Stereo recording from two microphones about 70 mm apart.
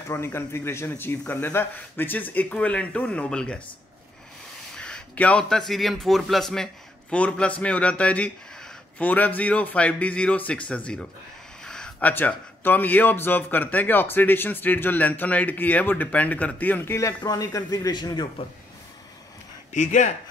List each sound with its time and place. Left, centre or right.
0.2 s a man's voice: left; by 3.6 s centre
4.7 s a sound: centre
5.1 s speech: left
5.4 s a man's voice: centre
7.1 s a man's voice: centre
11.6 s a sound: centre
12.0 s a man's voice: left
17.2 s speech: left